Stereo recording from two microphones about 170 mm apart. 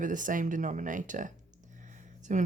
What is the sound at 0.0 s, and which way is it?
Speech, 50° right (ahead or behind).